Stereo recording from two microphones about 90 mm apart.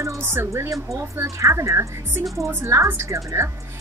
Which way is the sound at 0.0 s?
30° right (ahead or behind).